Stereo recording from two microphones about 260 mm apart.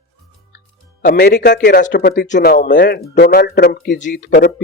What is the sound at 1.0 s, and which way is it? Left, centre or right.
Speech, left.